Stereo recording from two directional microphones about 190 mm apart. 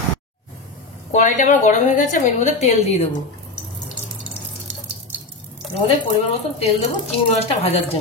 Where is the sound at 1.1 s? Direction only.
40° left (ahead or behind).